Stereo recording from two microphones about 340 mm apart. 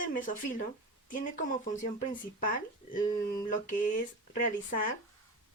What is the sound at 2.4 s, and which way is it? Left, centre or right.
Speech, left.